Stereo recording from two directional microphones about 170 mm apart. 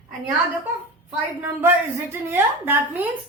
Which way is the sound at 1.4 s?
15° right (ahead or behind).